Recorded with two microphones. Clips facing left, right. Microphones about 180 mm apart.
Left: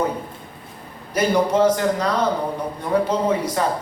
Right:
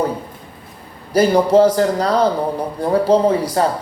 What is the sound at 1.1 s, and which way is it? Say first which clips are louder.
A man's voice: right 6 dB; 35° right (ahead or behind).